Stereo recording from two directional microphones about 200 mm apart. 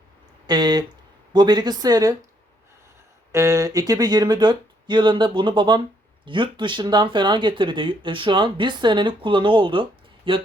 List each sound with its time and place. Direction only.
0.4 s speech: 20° right (ahead or behind)
3.3 s speech: 15° right (ahead or behind)